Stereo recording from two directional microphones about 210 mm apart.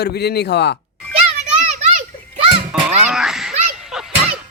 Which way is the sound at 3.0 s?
5° right (ahead or behind).